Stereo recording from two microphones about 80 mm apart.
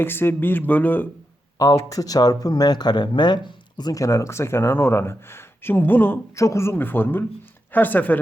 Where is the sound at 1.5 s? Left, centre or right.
Left.